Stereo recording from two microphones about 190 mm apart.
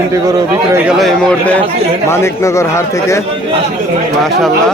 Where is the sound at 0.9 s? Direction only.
Centre (ahead or behind).